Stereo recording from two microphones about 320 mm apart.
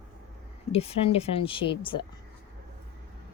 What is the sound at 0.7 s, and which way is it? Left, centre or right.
Speech, centre.